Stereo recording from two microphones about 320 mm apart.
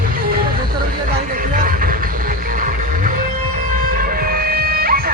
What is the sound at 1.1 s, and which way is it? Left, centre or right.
Vehicle, right.